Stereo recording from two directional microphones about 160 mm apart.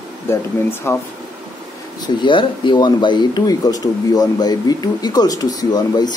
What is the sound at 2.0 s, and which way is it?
Speech, 30° left (ahead or behind).